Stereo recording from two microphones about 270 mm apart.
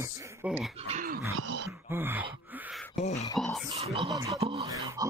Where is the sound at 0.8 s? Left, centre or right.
Right.